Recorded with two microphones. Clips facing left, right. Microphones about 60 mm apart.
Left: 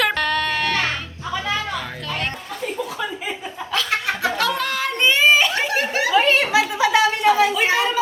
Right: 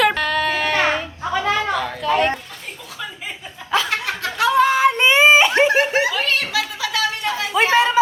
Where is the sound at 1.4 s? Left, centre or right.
Right.